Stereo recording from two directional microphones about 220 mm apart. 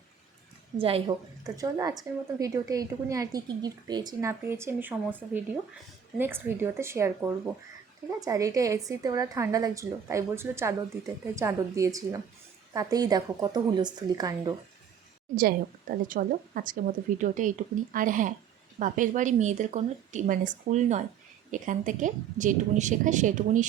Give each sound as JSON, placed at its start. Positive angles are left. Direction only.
{"t": 0.8, "sound": "a woman's voice", "side_deg": -25}
{"t": 15.4, "sound": "a woman's voice", "side_deg": -40}